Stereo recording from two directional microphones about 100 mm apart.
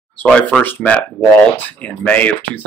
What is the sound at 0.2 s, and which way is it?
Speech, 10° left (ahead or behind).